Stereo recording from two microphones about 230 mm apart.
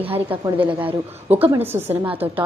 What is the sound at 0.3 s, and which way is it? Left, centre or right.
A woman's voice, centre.